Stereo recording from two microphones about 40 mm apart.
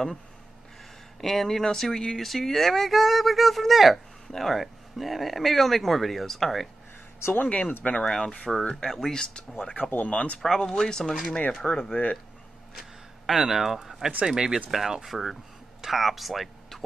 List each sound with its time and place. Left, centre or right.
1.2 s speech: centre
7.4 s speech: left
8.0 s speech: centre
9.8 s speech: left
10.1 s speech: left
10.4 s speech: centre
11.6 s speech: left
13.3 s speech: centre